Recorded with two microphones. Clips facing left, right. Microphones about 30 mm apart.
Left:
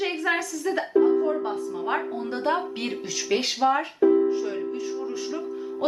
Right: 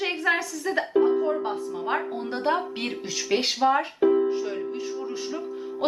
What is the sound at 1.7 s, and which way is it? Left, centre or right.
Speech, centre.